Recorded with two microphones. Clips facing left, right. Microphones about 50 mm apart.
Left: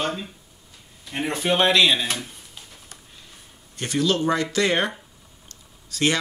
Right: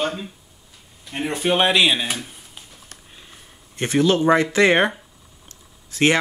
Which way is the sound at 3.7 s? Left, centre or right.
Right.